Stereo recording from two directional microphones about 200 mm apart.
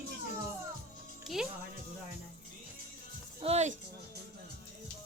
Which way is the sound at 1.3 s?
Centre (ahead or behind).